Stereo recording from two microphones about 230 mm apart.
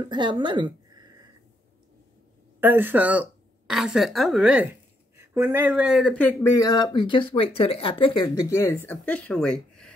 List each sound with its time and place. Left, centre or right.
0.0 s speech: centre
2.6 s a woman's voice: centre
6.4 s speech: centre
8.5 s speech: centre